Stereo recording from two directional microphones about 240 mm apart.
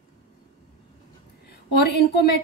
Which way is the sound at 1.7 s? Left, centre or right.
Left.